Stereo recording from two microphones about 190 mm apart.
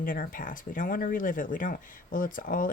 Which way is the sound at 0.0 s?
45° left (ahead or behind).